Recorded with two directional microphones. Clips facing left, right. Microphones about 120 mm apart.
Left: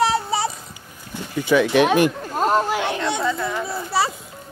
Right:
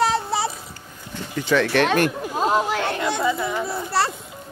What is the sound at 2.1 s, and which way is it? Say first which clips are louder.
Chatter: left 1 dB; 10° right (ahead or behind).